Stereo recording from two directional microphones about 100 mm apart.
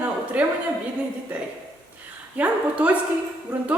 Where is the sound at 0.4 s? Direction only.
10° right (ahead or behind).